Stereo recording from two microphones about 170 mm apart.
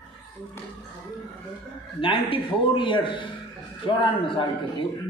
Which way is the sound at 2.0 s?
30° left (ahead or behind).